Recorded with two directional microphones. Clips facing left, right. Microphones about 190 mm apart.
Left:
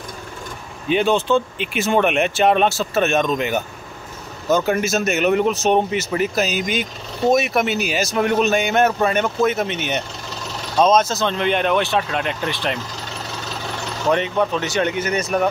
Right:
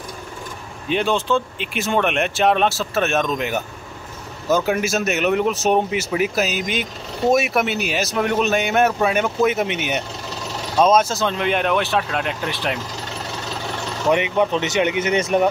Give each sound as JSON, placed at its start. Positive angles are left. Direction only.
{"t": 0.8, "sound": "speech", "side_deg": 0}
{"t": 14.0, "sound": "speech", "side_deg": -10}